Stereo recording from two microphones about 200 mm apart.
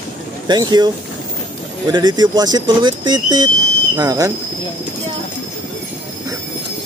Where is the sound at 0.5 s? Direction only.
20° right (ahead or behind).